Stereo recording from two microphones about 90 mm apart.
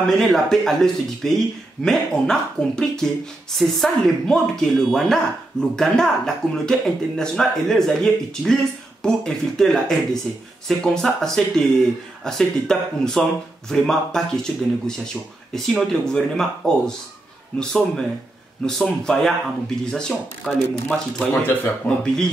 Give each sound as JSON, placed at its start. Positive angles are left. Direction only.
{"t": 0.0, "sound": "speech", "side_deg": 5}
{"t": 21.2, "sound": "speech", "side_deg": 20}